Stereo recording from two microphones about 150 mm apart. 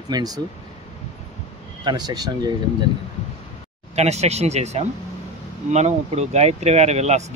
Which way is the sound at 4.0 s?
45° right (ahead or behind).